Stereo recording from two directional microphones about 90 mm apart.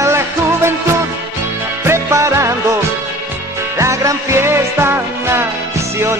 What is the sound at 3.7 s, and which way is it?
Music, 35° right (ahead or behind).